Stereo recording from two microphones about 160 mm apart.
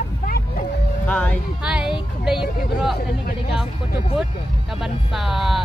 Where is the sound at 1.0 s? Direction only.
10° left (ahead or behind).